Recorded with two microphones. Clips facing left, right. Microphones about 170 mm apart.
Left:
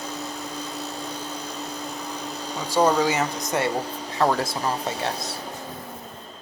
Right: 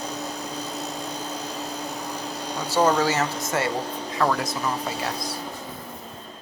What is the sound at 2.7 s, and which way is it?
Speech, 10° left (ahead or behind).